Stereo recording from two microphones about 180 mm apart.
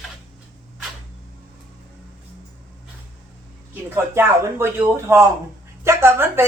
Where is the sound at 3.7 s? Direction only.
10° right (ahead or behind).